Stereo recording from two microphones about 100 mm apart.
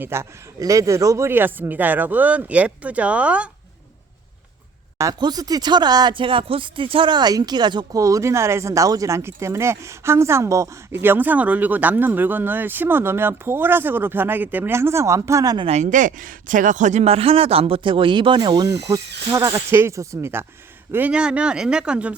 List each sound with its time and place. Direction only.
0.0 s speech: 25° right (ahead or behind)
5.2 s speech: 40° right (ahead or behind)
6.1 s speech: 60° right (ahead or behind)
8.0 s speech: 30° right (ahead or behind)
15.5 s speech: 70° right (ahead or behind)
17.0 s speech: 80° right; by 20.4 s 30° right (ahead or behind)
20.9 s speech: 15° right (ahead or behind)